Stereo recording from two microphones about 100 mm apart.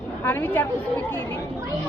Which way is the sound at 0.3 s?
20° left (ahead or behind).